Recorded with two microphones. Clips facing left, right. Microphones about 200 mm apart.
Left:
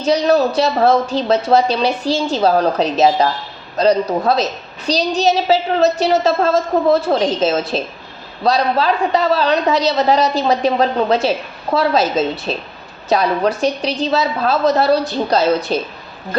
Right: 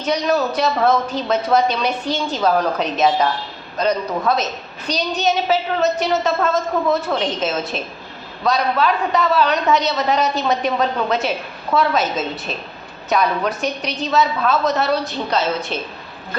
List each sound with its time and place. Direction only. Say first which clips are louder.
0.0 s a man's voice: left 5 dB; 30° left (ahead or behind)